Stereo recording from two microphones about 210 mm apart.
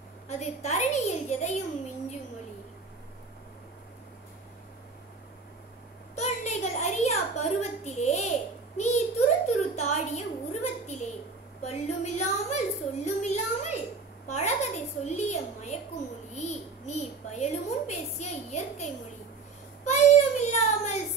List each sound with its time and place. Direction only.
0.3 s a woman's voice: 30° left (ahead or behind)
6.1 s a sound: 30° left (ahead or behind)
19.8 s child singing: 35° left (ahead or behind)